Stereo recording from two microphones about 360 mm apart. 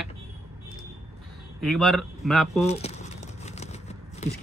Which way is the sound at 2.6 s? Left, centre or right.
Centre.